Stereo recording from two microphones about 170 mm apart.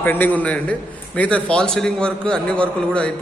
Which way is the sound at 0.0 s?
10° left (ahead or behind).